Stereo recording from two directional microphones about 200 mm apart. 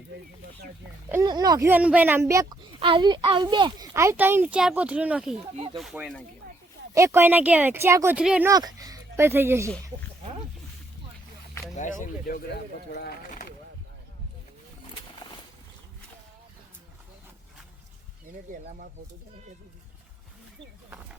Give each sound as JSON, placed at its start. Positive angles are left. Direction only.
{"t": 1.1, "sound": "speech", "side_deg": -20}
{"t": 6.9, "sound": "speech", "side_deg": -15}
{"t": 8.4, "sound": "speech", "side_deg": -20}
{"t": 11.7, "sound": "speech", "side_deg": 40}
{"t": 12.9, "sound": "a sound", "side_deg": 50}
{"t": 18.6, "sound": "speech", "side_deg": -40}